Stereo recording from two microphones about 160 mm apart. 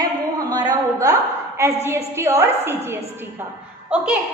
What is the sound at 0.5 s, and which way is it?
A woman's voice, 25° right (ahead or behind).